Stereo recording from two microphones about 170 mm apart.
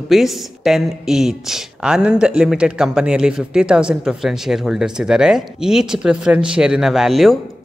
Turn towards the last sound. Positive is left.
turn(degrees=0)  # may be behind; listen again after turning